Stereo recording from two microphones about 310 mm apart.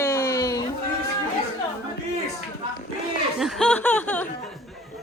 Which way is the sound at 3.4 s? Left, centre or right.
Centre.